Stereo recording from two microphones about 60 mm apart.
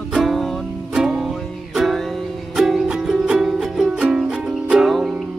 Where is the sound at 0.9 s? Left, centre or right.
Centre.